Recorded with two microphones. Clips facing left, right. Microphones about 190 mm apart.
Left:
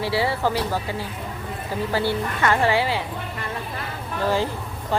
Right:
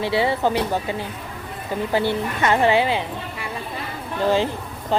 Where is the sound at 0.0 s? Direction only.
20° right (ahead or behind).